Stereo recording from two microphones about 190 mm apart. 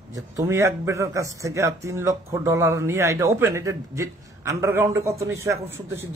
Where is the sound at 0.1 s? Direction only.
15° right (ahead or behind).